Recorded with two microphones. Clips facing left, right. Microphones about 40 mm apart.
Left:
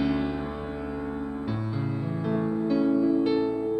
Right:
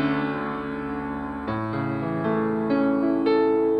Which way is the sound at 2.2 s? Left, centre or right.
Right.